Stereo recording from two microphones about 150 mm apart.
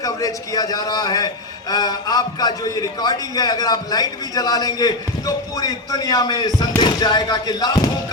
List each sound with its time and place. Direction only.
0.0 s a man's voice: 25° left (ahead or behind)